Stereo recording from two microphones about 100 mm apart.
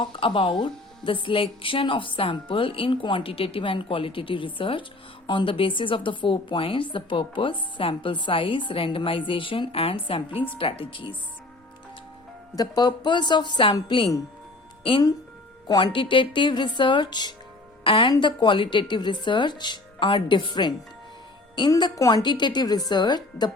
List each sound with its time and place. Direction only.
0.0 s speech: 55° left (ahead or behind)
12.5 s speech: 40° left (ahead or behind)
15.6 s speech: 50° left (ahead or behind)
17.8 s speech: 60° left (ahead or behind)
21.9 s a woman's voice: 35° left (ahead or behind)
22.2 s speech: 50° left (ahead or behind)